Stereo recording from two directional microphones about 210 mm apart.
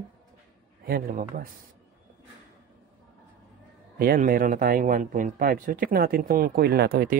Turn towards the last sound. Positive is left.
turn(degrees=-45)  # may be behind; listen again after turning